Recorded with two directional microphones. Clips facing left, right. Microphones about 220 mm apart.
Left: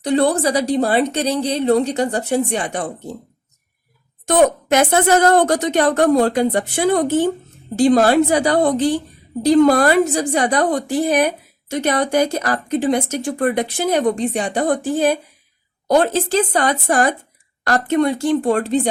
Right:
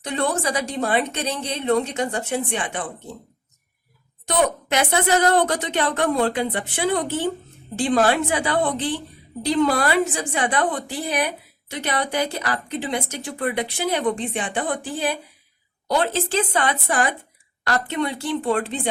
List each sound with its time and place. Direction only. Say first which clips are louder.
0.0 s a woman's voice: left 8 dB; 35° left (ahead or behind)
4.3 s a woman's voice: left 7 dB; 45° left (ahead or behind)